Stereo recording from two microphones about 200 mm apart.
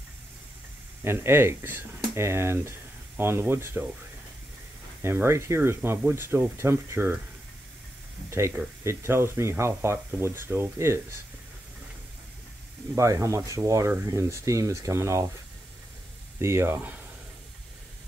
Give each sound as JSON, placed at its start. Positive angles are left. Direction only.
{"t": 1.0, "sound": "speech", "side_deg": -10}
{"t": 5.0, "sound": "speech", "side_deg": -10}
{"t": 8.3, "sound": "speech", "side_deg": -15}
{"t": 12.9, "sound": "speech", "side_deg": -15}
{"t": 16.3, "sound": "speech", "side_deg": -15}